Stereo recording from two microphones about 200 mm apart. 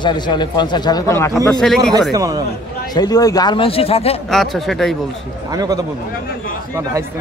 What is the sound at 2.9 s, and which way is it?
A man's voice, 20° left (ahead or behind).